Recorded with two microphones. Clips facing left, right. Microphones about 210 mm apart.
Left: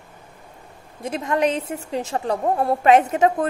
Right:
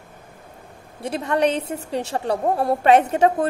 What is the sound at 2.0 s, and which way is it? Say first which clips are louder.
A woman's voice: even; 35° right (ahead or behind).